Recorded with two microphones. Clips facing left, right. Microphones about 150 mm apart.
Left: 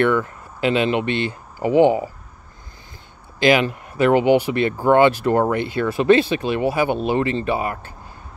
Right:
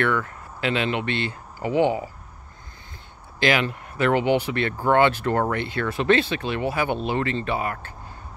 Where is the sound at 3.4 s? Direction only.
20° left (ahead or behind).